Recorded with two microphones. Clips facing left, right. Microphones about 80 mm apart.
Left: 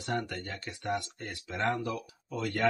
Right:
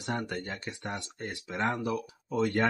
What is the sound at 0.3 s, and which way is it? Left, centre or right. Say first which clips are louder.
Speech: right 3 dB; right.